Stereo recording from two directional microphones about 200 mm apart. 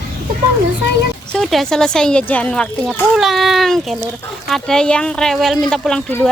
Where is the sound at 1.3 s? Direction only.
Centre (ahead or behind).